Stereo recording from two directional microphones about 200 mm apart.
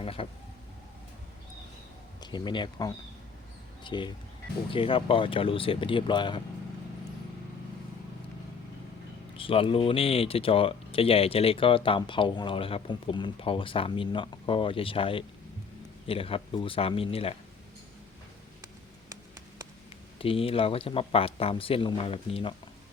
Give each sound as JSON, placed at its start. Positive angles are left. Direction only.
{"t": 0.0, "sound": "speech", "side_deg": 25}
{"t": 2.2, "sound": "speech", "side_deg": 20}
{"t": 9.4, "sound": "speech", "side_deg": 25}
{"t": 20.1, "sound": "speech", "side_deg": 25}